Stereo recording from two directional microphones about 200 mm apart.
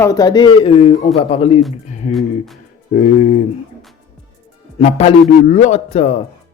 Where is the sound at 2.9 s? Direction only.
40° left (ahead or behind).